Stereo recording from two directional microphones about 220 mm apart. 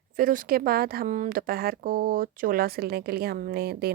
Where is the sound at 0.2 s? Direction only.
40° right (ahead or behind).